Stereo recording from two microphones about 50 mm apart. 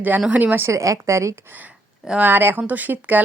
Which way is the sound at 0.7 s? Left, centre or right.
Right.